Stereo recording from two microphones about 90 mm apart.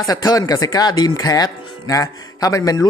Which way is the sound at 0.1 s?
45° left (ahead or behind).